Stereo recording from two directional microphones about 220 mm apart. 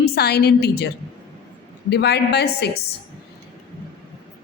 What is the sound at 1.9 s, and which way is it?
Speech, 50° left (ahead or behind).